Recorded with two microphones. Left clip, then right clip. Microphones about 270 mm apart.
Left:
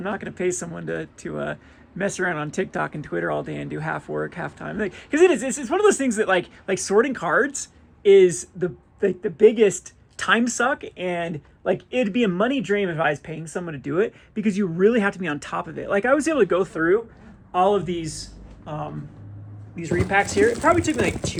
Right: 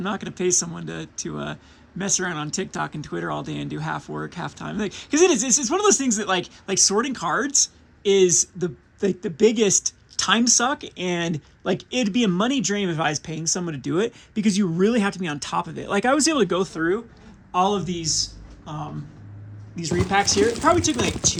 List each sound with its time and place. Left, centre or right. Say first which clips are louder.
0.0 s speech: even; centre
19.8 s speech: even; centre